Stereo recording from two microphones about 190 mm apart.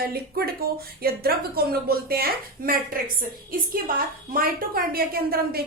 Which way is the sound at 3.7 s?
50° right (ahead or behind).